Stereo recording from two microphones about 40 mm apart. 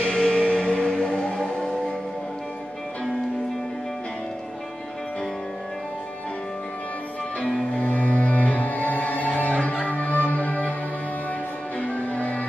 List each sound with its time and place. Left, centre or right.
0.2 s music: left
7.8 s music: left
11.8 s music: left